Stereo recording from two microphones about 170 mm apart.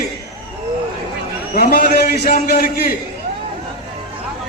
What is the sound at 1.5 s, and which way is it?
A man's voice, 60° left (ahead or behind).